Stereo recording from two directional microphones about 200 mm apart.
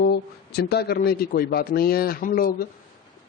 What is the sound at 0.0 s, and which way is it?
A man's voice, 55° left (ahead or behind).